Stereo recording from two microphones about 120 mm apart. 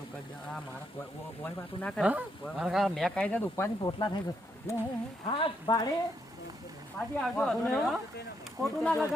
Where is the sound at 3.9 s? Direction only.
40° left (ahead or behind).